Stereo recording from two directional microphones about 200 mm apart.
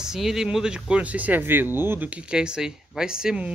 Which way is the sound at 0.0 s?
Centre (ahead or behind).